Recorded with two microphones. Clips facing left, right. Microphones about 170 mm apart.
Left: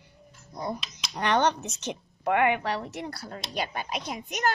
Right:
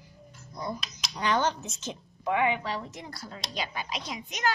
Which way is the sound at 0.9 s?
65° left (ahead or behind).